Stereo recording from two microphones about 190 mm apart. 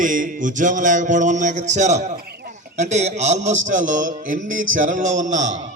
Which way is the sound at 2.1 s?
55° right (ahead or behind).